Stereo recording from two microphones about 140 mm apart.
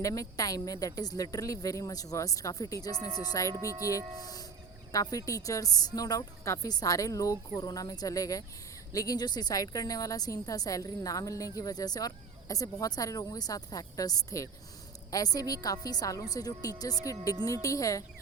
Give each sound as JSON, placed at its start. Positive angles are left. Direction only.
{"t": 0.0, "sound": "a woman's voice", "side_deg": 25}